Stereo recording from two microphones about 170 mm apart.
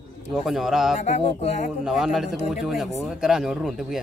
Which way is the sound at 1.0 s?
40° left (ahead or behind).